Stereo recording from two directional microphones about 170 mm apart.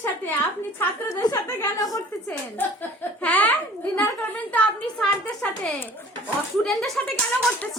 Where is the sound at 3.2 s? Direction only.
10° left (ahead or behind).